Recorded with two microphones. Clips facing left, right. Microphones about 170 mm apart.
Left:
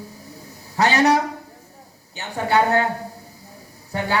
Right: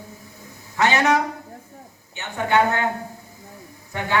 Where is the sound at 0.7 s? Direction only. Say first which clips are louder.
Left 2 dB; 35° left (ahead or behind).